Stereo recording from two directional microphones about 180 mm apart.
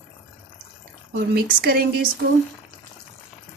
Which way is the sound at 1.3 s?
55° right (ahead or behind).